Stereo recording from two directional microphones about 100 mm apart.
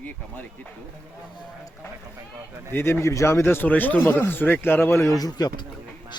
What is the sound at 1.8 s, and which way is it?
Speech, 25° left (ahead or behind).